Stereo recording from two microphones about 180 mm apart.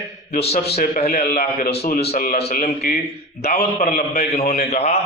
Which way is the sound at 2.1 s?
50° left (ahead or behind).